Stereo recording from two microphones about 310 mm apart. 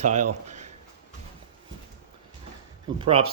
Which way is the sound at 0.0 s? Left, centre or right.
Right.